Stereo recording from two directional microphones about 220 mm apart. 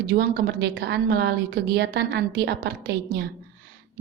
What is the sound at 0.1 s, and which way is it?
A woman's voice, 45° right (ahead or behind).